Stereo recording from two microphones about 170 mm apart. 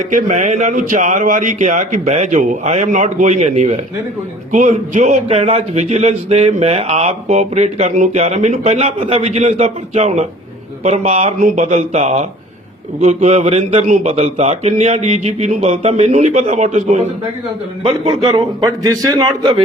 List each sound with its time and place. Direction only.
0.1 s a man's voice: 50° right (ahead or behind); by 18.4 s 30° right (ahead or behind)
18.6 s a man's voice: 20° right (ahead or behind)